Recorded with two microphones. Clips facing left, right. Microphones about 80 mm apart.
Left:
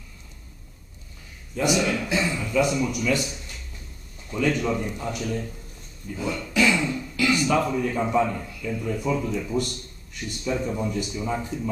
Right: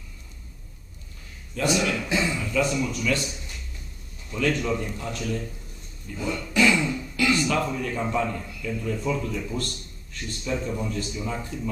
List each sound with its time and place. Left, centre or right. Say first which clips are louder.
1.6 s a man's voice: left 2 dB; centre
1.9 s speech: left 1 dB; centre
2.7 s a man's voice: left 2 dB; centre
4.3 s a man's voice: left 1 dB; centre
6.1 s speech: even; centre
7.2 s a man's voice: left 2 dB; centre